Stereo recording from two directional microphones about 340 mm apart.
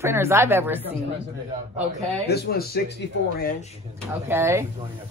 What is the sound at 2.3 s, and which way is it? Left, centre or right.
Speech, left.